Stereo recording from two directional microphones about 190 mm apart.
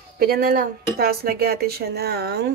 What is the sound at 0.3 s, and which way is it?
A woman's voice, 50° right (ahead or behind).